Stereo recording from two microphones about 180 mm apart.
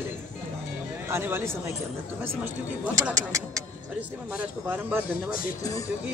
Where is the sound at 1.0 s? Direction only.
15° right (ahead or behind).